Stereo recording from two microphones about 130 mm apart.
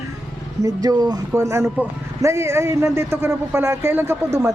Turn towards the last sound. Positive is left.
turn(degrees=-20)  # may be behind; listen again after turning